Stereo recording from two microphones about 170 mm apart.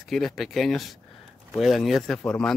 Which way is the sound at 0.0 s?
Centre (ahead or behind).